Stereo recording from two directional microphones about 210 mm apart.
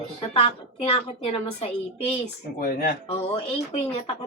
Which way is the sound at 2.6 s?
45° left (ahead or behind).